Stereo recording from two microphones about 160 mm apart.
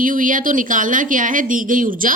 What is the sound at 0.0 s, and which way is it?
A woman's voice, 55° right (ahead or behind).